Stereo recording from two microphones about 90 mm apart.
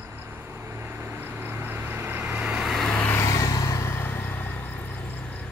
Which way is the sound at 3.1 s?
35° left (ahead or behind).